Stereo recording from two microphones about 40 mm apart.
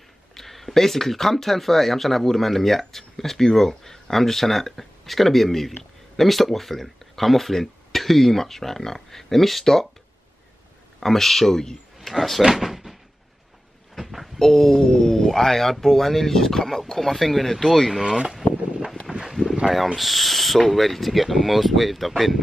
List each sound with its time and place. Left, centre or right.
0.3 s speech: centre
11.0 s speech: centre
12.1 s speech: centre
12.4 s speech: centre
13.9 s a sound: centre
14.4 s speech: centre
19.1 s a sound: right
20.0 s speech: centre